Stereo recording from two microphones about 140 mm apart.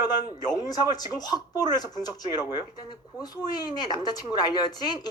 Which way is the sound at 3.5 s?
30° left (ahead or behind).